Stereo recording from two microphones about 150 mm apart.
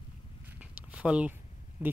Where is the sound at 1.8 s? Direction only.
10° right (ahead or behind).